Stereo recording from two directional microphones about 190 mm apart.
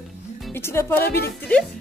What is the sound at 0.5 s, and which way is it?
Speech, 10° left (ahead or behind).